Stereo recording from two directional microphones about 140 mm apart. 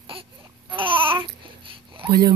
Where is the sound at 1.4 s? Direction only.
40° right (ahead or behind).